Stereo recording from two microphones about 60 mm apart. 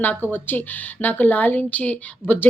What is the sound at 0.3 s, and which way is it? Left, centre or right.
Speech, left.